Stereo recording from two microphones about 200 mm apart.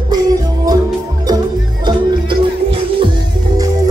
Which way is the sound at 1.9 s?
25° right (ahead or behind).